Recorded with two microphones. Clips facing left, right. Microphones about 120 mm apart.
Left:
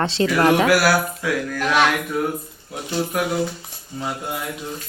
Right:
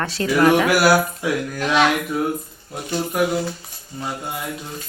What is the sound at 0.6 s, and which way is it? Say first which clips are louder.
Speech: right 1 dB; 20° right (ahead or behind).